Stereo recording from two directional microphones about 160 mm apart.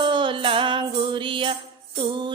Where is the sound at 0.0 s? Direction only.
30° right (ahead or behind).